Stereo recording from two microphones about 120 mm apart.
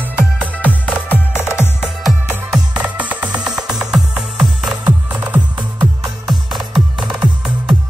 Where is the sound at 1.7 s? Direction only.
5° right (ahead or behind).